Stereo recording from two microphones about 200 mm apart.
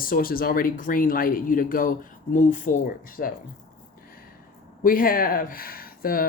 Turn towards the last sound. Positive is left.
turn(degrees=45)  # may be behind; listen again after turning